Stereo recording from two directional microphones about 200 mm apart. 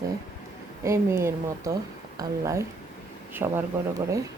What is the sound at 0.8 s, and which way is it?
Speech, 15° right (ahead or behind).